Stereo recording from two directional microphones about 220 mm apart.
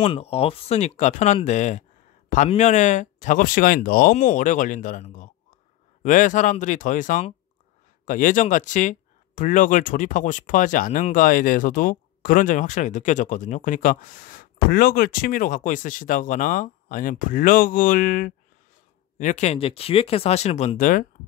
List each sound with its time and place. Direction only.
0.0 s speech: 30° left (ahead or behind)